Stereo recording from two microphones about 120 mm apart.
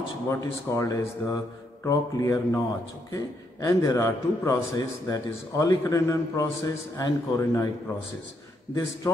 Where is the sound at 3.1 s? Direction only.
25° left (ahead or behind).